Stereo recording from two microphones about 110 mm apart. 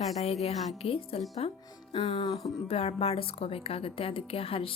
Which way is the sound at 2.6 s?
65° left (ahead or behind).